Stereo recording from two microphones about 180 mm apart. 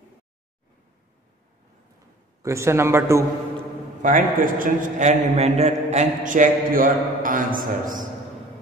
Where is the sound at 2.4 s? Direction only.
15° right (ahead or behind).